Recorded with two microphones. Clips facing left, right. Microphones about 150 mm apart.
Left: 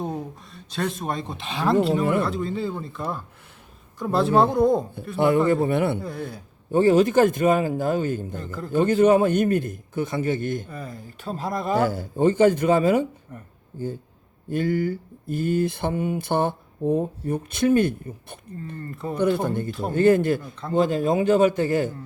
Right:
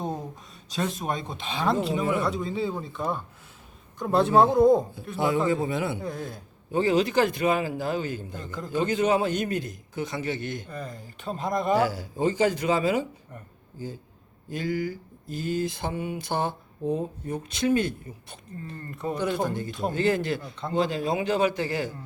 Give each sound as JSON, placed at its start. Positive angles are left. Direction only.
{"t": 0.9, "sound": "speech", "side_deg": 0}
{"t": 5.1, "sound": "speech", "side_deg": 60}
{"t": 6.0, "sound": "speech", "side_deg": 5}
{"t": 6.7, "sound": "a man's voice", "side_deg": 50}
{"t": 8.4, "sound": "speech", "side_deg": 5}
{"t": 8.7, "sound": "a man's voice", "side_deg": 50}
{"t": 10.7, "sound": "speech", "side_deg": 5}
{"t": 11.9, "sound": "a man's voice", "side_deg": 55}
{"t": 14.5, "sound": "a man's voice", "side_deg": 55}
{"t": 20.4, "sound": "speech", "side_deg": 0}
{"t": 20.7, "sound": "a man's voice", "side_deg": 45}